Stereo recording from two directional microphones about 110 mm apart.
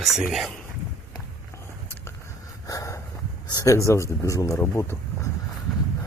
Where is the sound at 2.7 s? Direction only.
30° left (ahead or behind).